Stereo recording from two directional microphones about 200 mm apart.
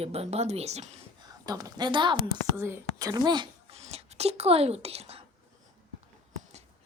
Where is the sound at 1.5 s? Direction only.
20° right (ahead or behind).